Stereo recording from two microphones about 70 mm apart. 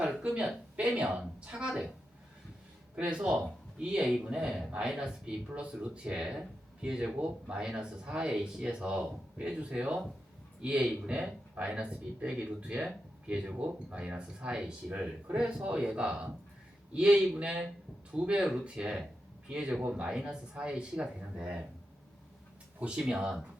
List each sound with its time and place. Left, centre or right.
0.2 s speech: centre
2.9 s speech: centre
22.8 s speech: centre